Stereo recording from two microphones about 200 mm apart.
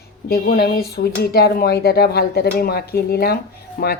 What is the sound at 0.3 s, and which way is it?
Speech, 45° left (ahead or behind).